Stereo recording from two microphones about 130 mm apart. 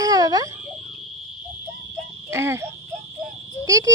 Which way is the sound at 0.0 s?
30° right (ahead or behind).